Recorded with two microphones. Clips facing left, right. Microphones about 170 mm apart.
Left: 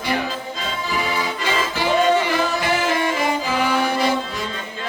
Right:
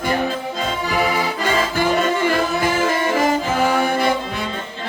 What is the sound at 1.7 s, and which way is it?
Music, 50° right (ahead or behind).